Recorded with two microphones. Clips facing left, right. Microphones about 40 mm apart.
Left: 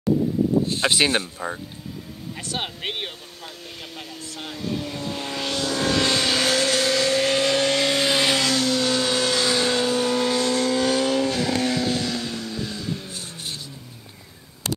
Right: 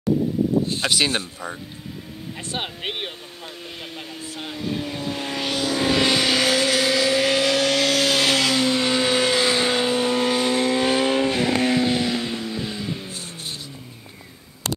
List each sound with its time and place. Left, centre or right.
0.8 s speech: centre
2.6 s speech: centre
3.9 s a sound: right
4.4 s vehicle: centre
8.2 s a sound: centre
8.6 s vehicle: right